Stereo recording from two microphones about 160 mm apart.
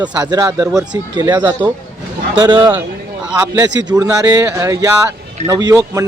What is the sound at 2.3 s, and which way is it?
Speech, 25° right (ahead or behind).